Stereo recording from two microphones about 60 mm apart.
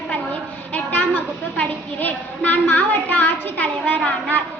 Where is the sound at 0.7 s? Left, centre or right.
Left.